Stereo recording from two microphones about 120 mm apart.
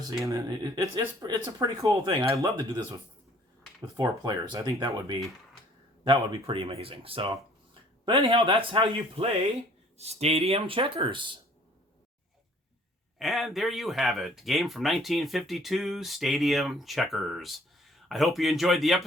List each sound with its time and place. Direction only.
0.3 s speech: 30° right (ahead or behind)
6.1 s speech: 50° right (ahead or behind)
10.0 s speech: 65° right (ahead or behind); by 11.3 s 40° right (ahead or behind)
13.1 s speech: centre (ahead or behind)